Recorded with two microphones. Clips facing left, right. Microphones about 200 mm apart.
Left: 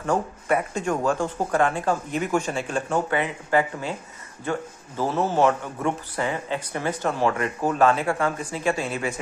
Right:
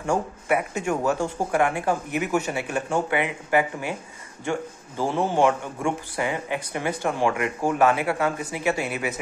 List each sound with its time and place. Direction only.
0.0 s a man's voice: 10° right (ahead or behind)